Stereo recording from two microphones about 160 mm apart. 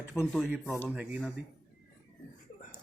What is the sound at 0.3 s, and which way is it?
Speech, centre (ahead or behind).